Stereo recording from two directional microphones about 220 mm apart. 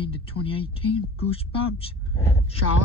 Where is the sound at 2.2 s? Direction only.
10° left (ahead or behind).